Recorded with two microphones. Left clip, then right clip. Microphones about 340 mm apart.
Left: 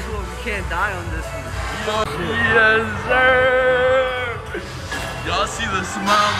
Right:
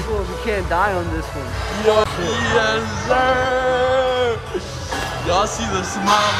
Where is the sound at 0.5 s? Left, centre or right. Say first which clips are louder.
Right 4 dB; right.